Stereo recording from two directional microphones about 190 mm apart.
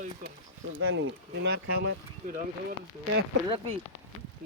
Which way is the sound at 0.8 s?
85° right.